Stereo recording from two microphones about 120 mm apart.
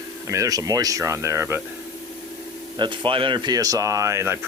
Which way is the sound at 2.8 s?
45° right (ahead or behind).